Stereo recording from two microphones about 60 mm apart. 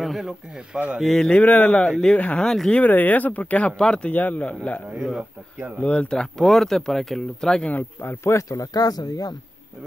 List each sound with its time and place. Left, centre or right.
0.0 s speech: centre
0.7 s speech: centre
1.1 s speech: centre
1.4 s speech: left
2.4 s speech: centre
2.7 s speech: left; by 7.7 s centre
7.7 s a man's voice: left
8.2 s speech: left
8.5 s speech: left